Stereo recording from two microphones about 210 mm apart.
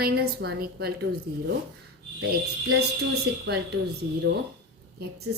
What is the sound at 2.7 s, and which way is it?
Speech, 50° right (ahead or behind).